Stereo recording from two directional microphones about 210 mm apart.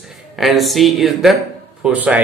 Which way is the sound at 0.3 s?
Centre (ahead or behind).